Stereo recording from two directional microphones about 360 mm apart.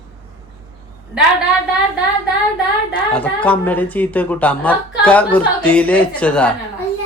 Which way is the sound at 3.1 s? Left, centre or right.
Centre.